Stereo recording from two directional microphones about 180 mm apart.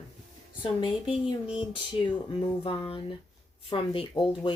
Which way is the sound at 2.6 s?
30° left (ahead or behind).